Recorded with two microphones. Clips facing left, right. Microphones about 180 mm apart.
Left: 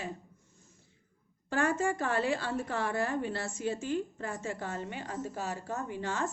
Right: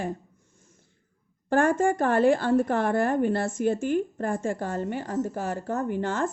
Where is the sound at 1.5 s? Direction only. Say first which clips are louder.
Right 8 dB; 50° right (ahead or behind).